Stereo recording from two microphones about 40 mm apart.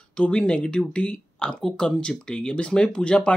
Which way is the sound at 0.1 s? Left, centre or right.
Left.